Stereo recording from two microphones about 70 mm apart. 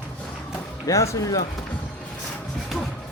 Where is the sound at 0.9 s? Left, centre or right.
Left.